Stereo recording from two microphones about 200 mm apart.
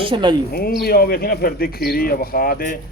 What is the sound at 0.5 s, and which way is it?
Speech, 50° left (ahead or behind).